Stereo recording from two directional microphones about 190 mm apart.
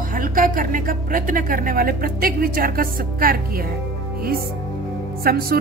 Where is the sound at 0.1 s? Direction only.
45° right (ahead or behind).